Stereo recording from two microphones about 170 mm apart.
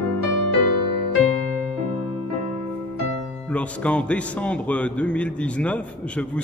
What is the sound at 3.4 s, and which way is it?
A man's voice, 5° left (ahead or behind).